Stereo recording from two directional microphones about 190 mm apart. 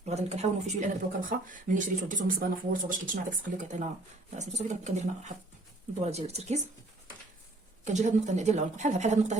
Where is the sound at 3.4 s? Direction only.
40° right (ahead or behind).